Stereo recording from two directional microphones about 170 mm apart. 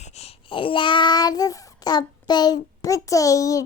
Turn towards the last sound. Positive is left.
turn(degrees=20)  # may be behind; listen again after turning